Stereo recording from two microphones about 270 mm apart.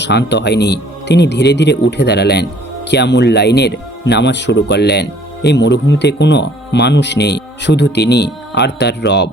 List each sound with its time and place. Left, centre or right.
0.0 s speech: left